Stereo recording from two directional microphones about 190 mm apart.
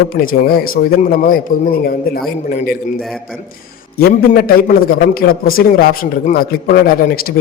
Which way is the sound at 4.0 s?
55° left (ahead or behind).